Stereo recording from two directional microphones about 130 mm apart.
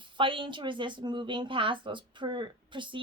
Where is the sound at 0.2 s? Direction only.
40° right (ahead or behind).